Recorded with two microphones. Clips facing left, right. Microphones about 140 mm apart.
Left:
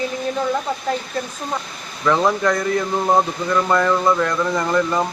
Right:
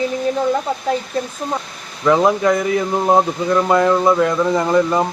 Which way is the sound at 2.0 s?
15° right (ahead or behind).